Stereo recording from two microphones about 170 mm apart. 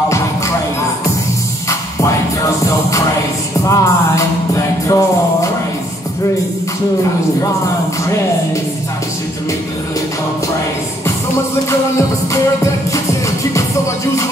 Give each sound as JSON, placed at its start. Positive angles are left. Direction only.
{"t": 3.6, "sound": "music", "side_deg": 20}